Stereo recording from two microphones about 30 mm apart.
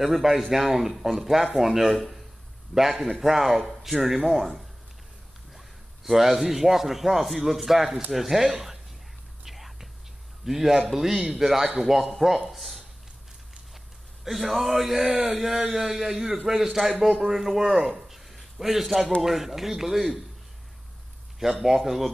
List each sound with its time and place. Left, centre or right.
0.0 s a man's voice: centre
2.0 s a man's voice: centre
2.7 s a man's voice: centre
6.0 s a man's voice: centre
9.4 s whispering: centre
10.4 s a man's voice: centre
14.3 s a man's voice: centre
21.4 s a man's voice: centre